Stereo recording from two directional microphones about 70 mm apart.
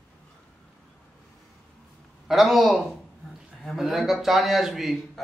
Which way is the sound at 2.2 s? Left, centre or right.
Centre.